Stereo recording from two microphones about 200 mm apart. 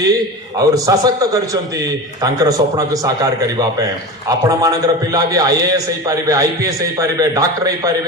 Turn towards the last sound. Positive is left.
turn(degrees=-20)  # may be behind; listen again after turning